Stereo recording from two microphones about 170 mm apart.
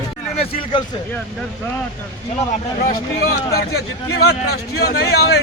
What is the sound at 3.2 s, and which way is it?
A man's voice, 65° left (ahead or behind).